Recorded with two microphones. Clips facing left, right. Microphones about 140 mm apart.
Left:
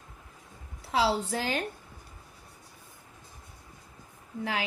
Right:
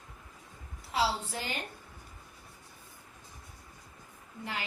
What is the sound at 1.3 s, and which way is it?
Speech, 90° left.